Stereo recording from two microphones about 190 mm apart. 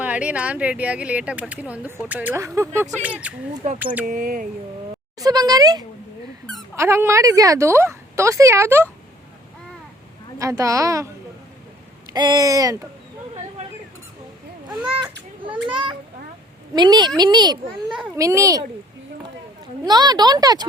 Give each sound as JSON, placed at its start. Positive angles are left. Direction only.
{"t": 0.0, "sound": "speech", "side_deg": -5}
{"t": 4.0, "sound": "speech", "side_deg": -45}
{"t": 5.2, "sound": "speech", "side_deg": -20}
{"t": 10.3, "sound": "speech", "side_deg": -15}
{"t": 12.1, "sound": "speech", "side_deg": -20}
{"t": 15.4, "sound": "children playing", "side_deg": -25}
{"t": 16.7, "sound": "speech", "side_deg": -20}
{"t": 17.8, "sound": "a child's voice", "side_deg": -5}
{"t": 18.2, "sound": "speech", "side_deg": -15}
{"t": 19.8, "sound": "speech", "side_deg": -20}